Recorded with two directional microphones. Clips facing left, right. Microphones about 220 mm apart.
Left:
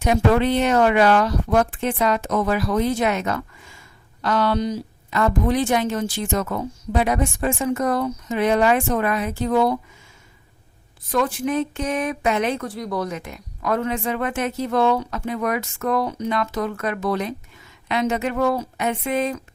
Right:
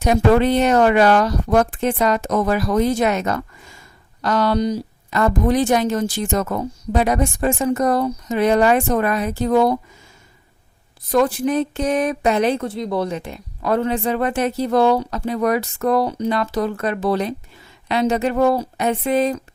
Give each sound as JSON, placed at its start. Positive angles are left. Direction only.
{"t": 0.0, "sound": "speech", "side_deg": -40}
{"t": 11.1, "sound": "speech", "side_deg": -35}